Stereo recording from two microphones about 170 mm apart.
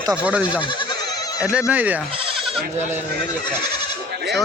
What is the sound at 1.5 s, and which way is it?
Speech, 5° right (ahead or behind).